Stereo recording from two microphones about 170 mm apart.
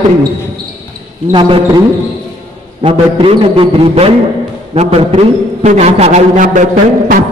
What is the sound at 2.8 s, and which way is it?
A man's voice, 30° right (ahead or behind).